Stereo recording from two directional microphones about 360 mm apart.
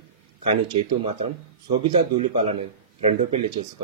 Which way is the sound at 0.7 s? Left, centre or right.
Centre.